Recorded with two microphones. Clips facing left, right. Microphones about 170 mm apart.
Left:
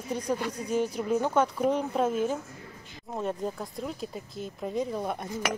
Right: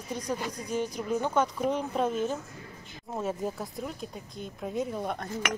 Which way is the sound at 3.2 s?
5° right (ahead or behind).